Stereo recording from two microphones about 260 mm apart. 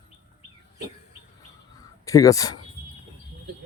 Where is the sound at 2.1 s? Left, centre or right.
Centre.